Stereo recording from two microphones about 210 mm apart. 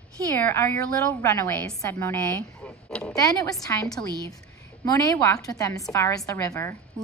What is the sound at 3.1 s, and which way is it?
A woman's voice, 15° left (ahead or behind).